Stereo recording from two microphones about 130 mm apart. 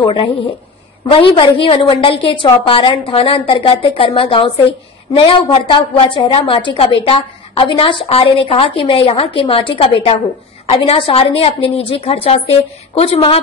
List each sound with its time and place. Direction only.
1.1 s a woman's voice: 40° left (ahead or behind)